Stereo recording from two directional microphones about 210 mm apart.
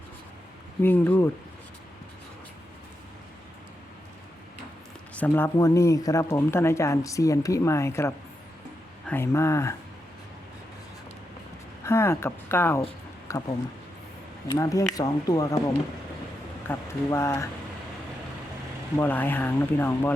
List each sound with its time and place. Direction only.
0.8 s speech: 10° left (ahead or behind)
5.1 s speech: 10° left (ahead or behind)
11.8 s speech: 10° left (ahead or behind)
18.9 s speech: 10° left (ahead or behind)